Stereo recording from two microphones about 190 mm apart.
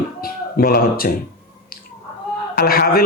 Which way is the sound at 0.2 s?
50° left (ahead or behind).